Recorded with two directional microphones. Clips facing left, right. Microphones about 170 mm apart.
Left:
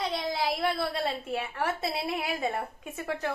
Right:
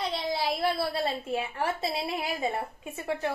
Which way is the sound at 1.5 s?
30° right (ahead or behind).